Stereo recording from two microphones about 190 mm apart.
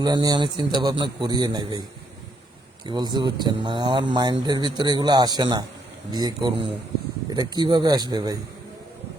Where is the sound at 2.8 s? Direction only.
20° right (ahead or behind).